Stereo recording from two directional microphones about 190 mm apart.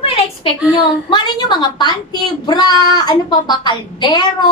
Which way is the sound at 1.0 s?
25° left (ahead or behind).